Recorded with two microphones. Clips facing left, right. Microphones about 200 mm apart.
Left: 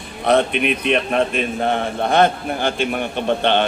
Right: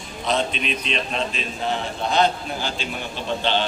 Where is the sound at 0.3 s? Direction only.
60° left (ahead or behind).